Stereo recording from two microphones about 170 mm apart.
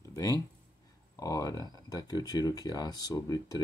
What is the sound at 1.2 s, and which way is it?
Speech, 20° left (ahead or behind).